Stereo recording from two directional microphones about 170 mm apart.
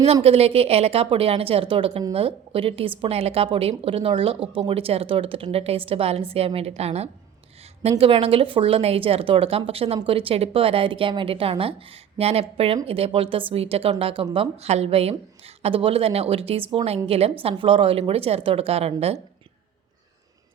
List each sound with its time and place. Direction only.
0.0 s speech: 35° right (ahead or behind)